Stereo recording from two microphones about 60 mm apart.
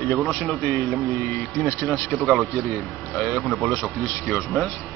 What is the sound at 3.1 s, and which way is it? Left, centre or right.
Speech, centre.